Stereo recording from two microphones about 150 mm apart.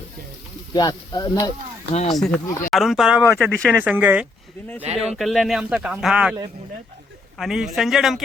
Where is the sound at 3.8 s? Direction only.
10° right (ahead or behind).